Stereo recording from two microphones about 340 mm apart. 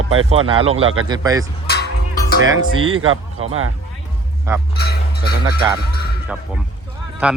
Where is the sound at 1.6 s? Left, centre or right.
Left.